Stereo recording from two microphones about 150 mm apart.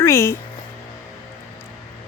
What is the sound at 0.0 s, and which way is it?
Speech, 15° left (ahead or behind).